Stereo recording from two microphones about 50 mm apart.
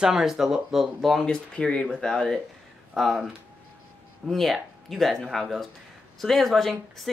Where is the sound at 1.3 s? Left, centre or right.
Centre.